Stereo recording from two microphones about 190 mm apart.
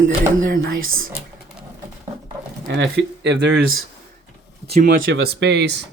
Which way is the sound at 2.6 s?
65° right (ahead or behind).